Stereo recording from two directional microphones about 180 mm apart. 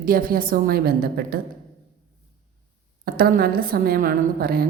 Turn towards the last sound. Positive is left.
turn(degrees=-55)  # may be behind; listen again after turning